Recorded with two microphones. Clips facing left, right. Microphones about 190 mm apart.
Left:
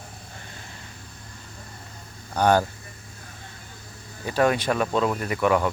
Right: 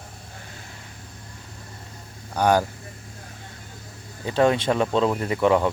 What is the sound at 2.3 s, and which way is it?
Speech, 10° right (ahead or behind).